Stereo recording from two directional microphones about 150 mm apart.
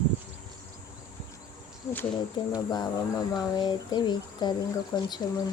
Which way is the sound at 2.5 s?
25° left (ahead or behind).